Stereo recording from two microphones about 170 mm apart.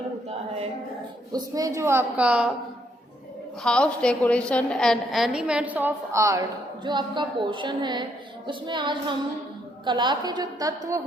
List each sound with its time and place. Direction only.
1.3 s a woman's voice: 20° right (ahead or behind)
3.6 s a woman's voice: 5° left (ahead or behind); by 10.8 s 25° right (ahead or behind)